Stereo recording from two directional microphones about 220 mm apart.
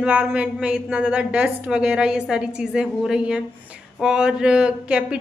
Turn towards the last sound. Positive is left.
turn(degrees=-5)  # may be behind; listen again after turning